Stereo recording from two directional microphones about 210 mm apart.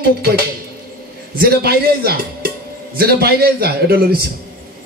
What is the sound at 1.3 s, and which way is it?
A man's voice, 45° right (ahead or behind).